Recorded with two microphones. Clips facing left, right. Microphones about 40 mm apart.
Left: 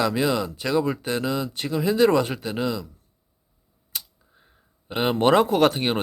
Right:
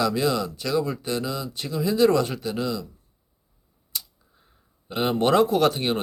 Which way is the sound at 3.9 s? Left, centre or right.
Left.